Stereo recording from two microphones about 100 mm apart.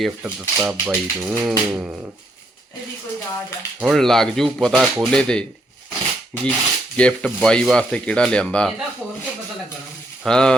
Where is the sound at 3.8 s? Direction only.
Centre (ahead or behind).